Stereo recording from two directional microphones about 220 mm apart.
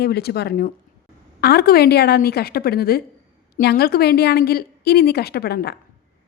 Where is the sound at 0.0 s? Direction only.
45° left (ahead or behind).